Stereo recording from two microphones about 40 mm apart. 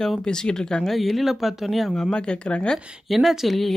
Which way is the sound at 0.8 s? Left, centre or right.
Centre.